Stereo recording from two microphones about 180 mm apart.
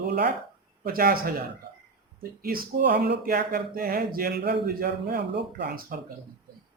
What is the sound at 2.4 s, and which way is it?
Speech, 55° right (ahead or behind).